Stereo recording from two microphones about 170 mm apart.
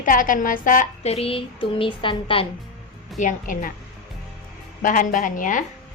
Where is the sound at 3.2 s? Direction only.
50° left (ahead or behind).